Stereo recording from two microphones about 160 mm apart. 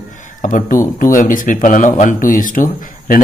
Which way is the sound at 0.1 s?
55° left (ahead or behind).